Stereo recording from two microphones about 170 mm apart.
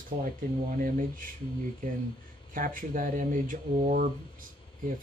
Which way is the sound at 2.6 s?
55° right (ahead or behind).